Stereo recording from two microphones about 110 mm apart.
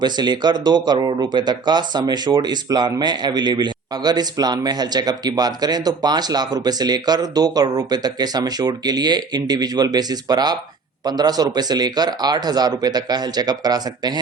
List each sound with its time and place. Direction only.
0.0 s speech: 40° right (ahead or behind)